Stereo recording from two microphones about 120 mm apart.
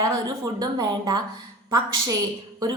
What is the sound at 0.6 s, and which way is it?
Speech, 30° right (ahead or behind).